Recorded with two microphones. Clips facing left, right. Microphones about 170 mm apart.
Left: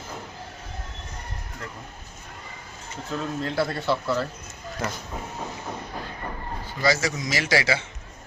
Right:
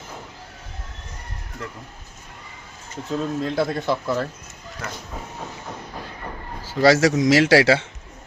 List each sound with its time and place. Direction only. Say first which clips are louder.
3.1 s speech: right 5 dB; 20° right (ahead or behind)
6.7 s a man's voice: right 9 dB; 70° right (ahead or behind)